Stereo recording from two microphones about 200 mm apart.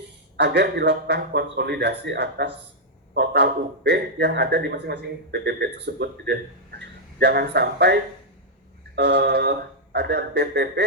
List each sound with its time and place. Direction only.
0.3 s a man's voice: 60° right (ahead or behind)
9.0 s a man's voice: 55° right (ahead or behind)